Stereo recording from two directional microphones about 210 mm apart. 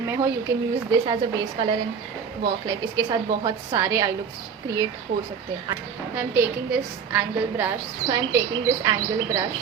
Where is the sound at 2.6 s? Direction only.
20° right (ahead or behind).